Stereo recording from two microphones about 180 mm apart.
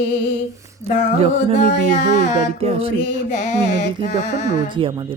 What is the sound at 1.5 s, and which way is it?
Speech, 40° left (ahead or behind).